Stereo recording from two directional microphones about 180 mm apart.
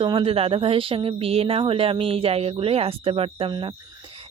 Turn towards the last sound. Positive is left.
turn(degrees=-30)  # may be behind; listen again after turning